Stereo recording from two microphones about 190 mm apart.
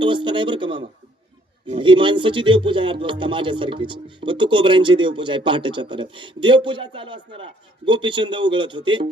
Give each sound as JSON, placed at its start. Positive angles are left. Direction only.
{"t": 0.0, "sound": "speech", "side_deg": -25}